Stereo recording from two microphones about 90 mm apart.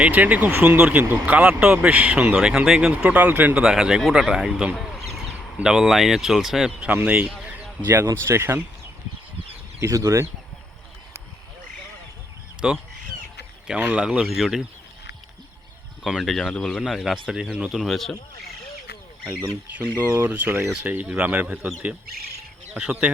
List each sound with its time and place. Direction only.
0.0 s speech: 15° right (ahead or behind)
4.8 s a sound: centre (ahead or behind)
5.5 s speech: 10° right (ahead or behind)
7.4 s a sound: 10° right (ahead or behind)
8.0 s speech: 30° right (ahead or behind)
9.8 s speech: 40° right (ahead or behind)
12.6 s speech: 10° right (ahead or behind)
13.7 s speech: 20° right (ahead or behind)
14.0 s speech: 10° right (ahead or behind)
16.0 s speech: centre (ahead or behind)
19.2 s speech: 25° right (ahead or behind)